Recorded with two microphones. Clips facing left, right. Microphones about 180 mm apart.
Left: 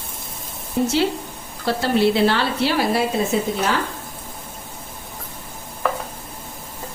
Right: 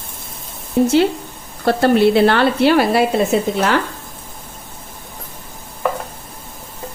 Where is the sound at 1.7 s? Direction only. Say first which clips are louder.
Right 5 dB; 55° right (ahead or behind).